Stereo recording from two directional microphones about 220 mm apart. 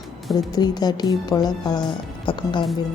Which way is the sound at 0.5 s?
20° left (ahead or behind).